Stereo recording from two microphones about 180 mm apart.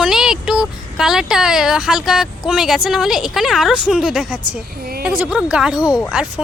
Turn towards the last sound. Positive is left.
turn(degrees=-5)  # may be behind; listen again after turning